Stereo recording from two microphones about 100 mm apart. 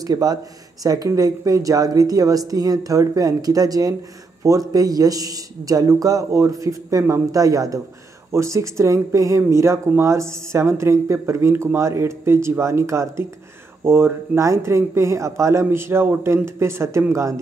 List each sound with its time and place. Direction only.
0.0 s a man's voice: 40° right (ahead or behind)